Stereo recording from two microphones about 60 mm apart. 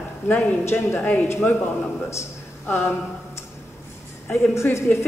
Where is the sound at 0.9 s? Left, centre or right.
Left.